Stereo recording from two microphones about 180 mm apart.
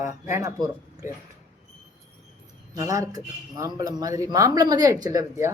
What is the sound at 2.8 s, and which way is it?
Speech, 20° right (ahead or behind).